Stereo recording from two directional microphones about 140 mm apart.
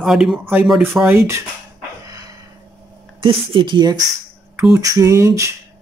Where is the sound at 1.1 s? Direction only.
20° right (ahead or behind).